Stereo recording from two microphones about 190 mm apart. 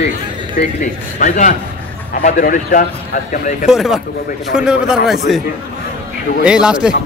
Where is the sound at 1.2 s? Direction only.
45° left (ahead or behind).